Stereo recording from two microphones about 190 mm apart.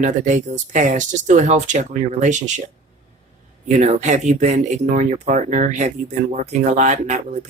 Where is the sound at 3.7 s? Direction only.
40° right (ahead or behind).